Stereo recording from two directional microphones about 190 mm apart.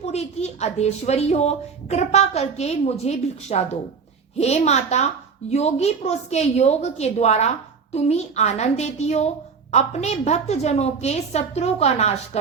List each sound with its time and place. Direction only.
0.0 s a woman's voice: 35° left (ahead or behind)